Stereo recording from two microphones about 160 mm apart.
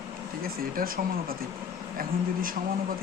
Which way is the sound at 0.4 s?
65° right (ahead or behind).